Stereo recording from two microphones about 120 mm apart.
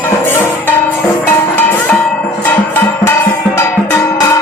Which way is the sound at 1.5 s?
15° left (ahead or behind).